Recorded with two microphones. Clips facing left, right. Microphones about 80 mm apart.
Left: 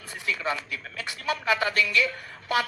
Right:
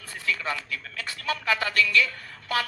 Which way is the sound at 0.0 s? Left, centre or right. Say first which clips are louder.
Even; centre.